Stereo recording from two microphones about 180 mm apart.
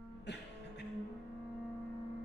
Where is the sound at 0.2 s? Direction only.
70° left (ahead or behind).